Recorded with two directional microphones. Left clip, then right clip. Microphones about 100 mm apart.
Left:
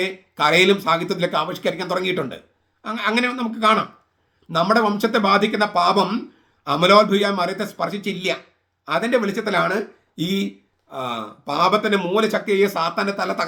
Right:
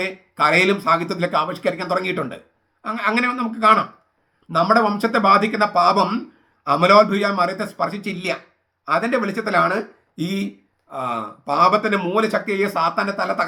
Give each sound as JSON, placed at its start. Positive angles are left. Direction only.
{"t": 0.0, "sound": "speech", "side_deg": 20}